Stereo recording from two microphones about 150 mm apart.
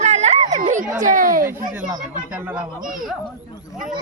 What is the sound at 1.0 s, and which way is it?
Speech, 60° right (ahead or behind).